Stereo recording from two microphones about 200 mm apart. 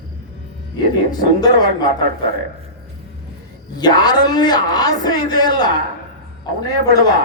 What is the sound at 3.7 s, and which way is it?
Speech, 20° left (ahead or behind).